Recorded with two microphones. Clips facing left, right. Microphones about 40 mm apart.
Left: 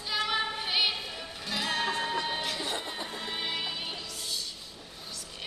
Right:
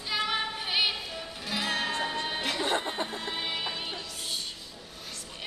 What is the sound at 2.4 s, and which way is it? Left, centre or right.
Music, right.